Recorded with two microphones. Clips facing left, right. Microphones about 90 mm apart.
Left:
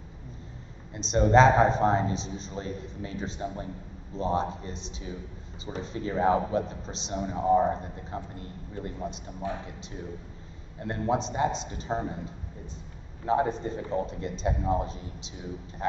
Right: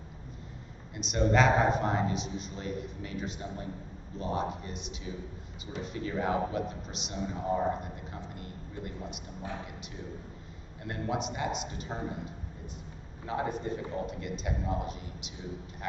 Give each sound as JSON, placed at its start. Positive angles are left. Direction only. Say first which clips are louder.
{"t": 0.9, "sound": "a man's voice", "louder": "left 6 dB", "side_deg": 30}
{"t": 10.8, "sound": "a man's voice", "louder": "left 6 dB", "side_deg": 30}
{"t": 13.3, "sound": "a man's voice", "louder": "left 6 dB", "side_deg": 30}